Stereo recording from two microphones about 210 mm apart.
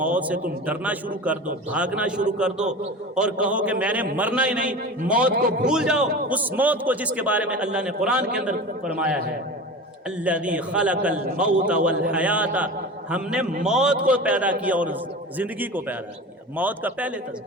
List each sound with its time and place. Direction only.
0.0 s a man's voice: 5° right (ahead or behind)
5.3 s a man's voice: 45° right (ahead or behind)
5.6 s a man's voice: 5° right (ahead or behind)
11.1 s a man's voice: 45° right (ahead or behind)
11.3 s a man's voice: 5° right (ahead or behind)